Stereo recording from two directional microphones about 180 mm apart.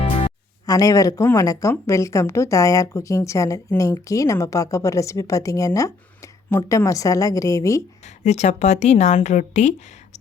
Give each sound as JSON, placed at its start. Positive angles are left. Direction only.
{"t": 0.6, "sound": "a woman's voice", "side_deg": 20}
{"t": 8.2, "sound": "a woman's voice", "side_deg": 40}